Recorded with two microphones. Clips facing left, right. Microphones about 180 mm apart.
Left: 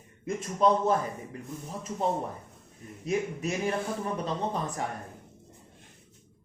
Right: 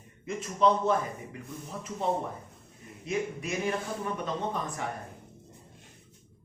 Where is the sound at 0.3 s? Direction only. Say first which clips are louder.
Left 1 dB; 45° left (ahead or behind).